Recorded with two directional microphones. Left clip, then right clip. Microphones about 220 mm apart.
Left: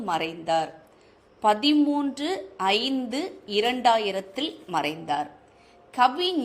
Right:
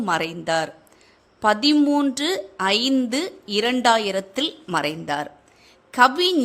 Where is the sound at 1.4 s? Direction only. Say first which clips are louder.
Right 3 dB; 25° right (ahead or behind).